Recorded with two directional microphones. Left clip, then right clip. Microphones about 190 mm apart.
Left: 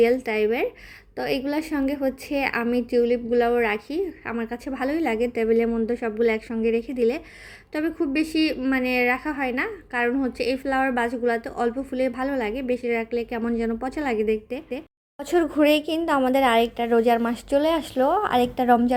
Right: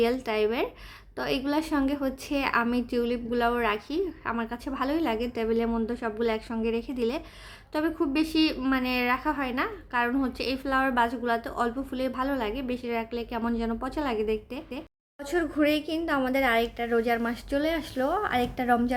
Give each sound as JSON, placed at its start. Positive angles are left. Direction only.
{"t": 0.0, "sound": "a woman's voice", "side_deg": 10}
{"t": 15.2, "sound": "speech", "side_deg": 30}